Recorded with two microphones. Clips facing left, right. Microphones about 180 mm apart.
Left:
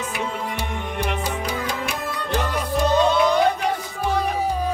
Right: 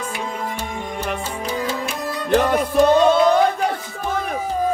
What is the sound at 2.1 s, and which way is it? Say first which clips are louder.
Music: right 9 dB; 50° right (ahead or behind).